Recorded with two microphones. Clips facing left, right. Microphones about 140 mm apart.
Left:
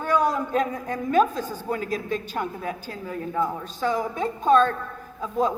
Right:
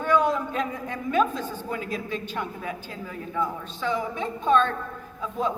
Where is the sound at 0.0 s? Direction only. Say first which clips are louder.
Even; 40° left (ahead or behind).